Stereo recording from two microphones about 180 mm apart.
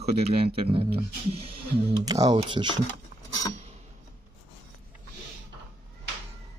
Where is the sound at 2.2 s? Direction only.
30° right (ahead or behind).